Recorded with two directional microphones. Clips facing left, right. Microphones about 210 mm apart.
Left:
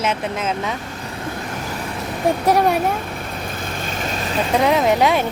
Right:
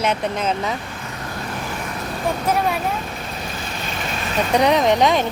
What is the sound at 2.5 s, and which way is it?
Speech, 40° left (ahead or behind).